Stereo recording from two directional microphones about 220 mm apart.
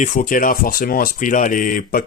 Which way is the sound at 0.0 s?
35° left (ahead or behind).